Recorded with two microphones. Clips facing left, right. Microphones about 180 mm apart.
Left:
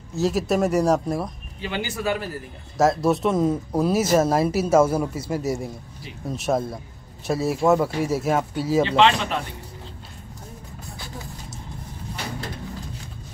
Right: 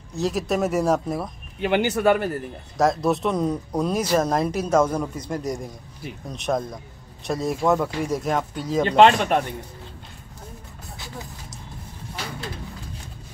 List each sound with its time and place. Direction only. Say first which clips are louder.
0.1 s speech: left 2 dB; centre (ahead or behind)
1.6 s speech: right 7 dB; 60° right (ahead or behind)
2.8 s speech: left 1 dB; centre (ahead or behind)
8.8 s speech: right 8 dB; 50° right (ahead or behind)